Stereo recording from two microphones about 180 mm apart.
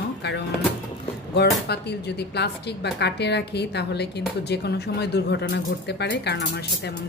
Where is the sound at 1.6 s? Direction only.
65° left (ahead or behind).